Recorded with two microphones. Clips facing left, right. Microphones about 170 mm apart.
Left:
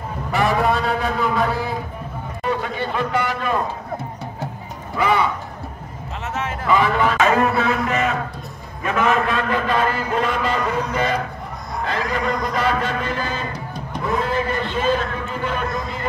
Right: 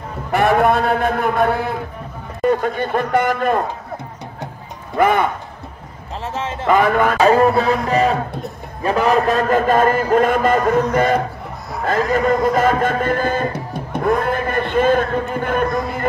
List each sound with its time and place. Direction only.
0.3 s a man's voice: 60° right (ahead or behind)
2.4 s a man's voice: 50° right (ahead or behind)
4.9 s a man's voice: 50° right (ahead or behind)
6.2 s speech: 30° right (ahead or behind)
6.7 s a man's voice: 50° right (ahead or behind)
7.2 s a man's voice: 35° right (ahead or behind); by 16.1 s 50° right (ahead or behind)